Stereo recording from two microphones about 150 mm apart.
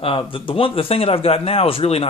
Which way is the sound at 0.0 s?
35° left (ahead or behind).